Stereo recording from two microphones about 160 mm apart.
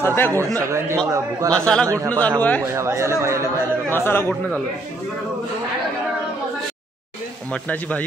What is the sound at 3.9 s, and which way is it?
Speech, 15° left (ahead or behind).